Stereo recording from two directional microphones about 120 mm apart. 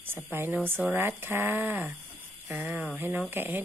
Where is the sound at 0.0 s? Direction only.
20° right (ahead or behind).